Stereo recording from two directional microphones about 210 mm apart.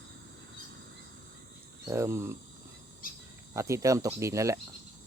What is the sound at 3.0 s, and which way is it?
Cricket, 40° left (ahead or behind).